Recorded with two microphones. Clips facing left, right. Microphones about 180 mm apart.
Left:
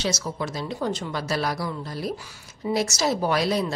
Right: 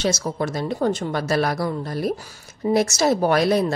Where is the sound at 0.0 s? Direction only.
50° right (ahead or behind).